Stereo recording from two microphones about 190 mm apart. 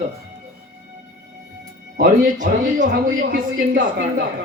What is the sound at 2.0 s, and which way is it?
Speech, 40° right (ahead or behind).